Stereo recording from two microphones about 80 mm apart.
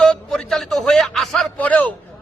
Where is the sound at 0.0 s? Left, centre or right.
Centre.